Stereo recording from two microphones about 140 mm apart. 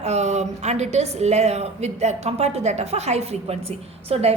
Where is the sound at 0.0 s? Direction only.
55° right (ahead or behind).